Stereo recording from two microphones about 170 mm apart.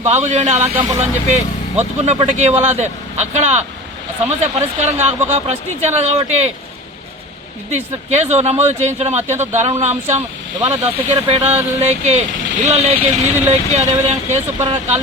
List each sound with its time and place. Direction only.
0.0 s speech: 40° right (ahead or behind)
7.7 s speech: 40° right (ahead or behind)